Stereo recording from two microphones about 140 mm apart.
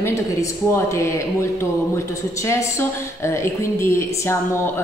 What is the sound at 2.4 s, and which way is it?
A woman's voice, 20° left (ahead or behind).